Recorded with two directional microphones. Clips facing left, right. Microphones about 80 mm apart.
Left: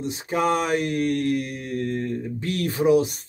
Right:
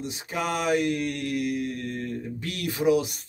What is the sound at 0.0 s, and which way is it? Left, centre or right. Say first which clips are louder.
Mantra: left 7 dB; left.